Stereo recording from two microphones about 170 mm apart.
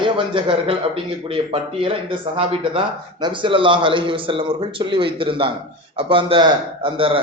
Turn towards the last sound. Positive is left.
turn(degrees=-30)  # may be behind; listen again after turning